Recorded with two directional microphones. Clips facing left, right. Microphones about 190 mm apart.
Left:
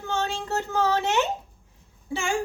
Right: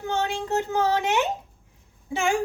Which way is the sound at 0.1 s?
15° right (ahead or behind).